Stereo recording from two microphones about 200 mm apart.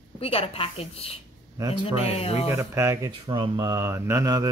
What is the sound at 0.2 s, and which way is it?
Speech, 30° left (ahead or behind).